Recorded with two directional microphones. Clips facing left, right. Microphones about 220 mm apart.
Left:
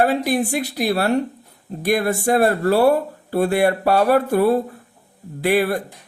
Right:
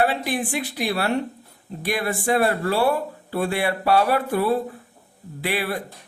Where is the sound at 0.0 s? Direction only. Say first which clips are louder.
Left 5 dB; 40° left (ahead or behind).